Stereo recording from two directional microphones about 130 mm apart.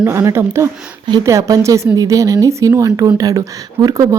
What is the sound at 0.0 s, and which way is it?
Speech, 20° right (ahead or behind).